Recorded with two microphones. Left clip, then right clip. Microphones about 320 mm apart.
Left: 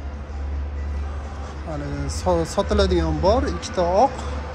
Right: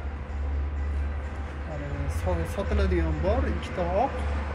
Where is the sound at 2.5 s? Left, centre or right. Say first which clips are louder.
Left 9 dB; left.